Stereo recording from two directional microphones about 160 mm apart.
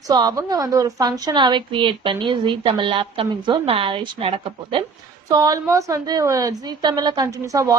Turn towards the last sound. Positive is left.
turn(degrees=-20)  # may be behind; listen again after turning